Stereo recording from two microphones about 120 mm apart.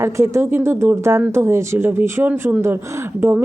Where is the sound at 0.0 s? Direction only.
20° right (ahead or behind).